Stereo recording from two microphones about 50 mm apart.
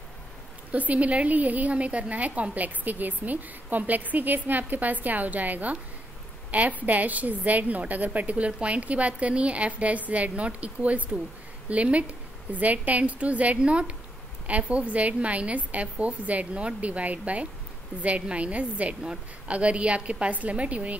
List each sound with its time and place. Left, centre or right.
0.7 s a woman's voice: right